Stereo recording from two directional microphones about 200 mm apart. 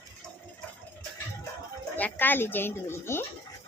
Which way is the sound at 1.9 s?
10° left (ahead or behind).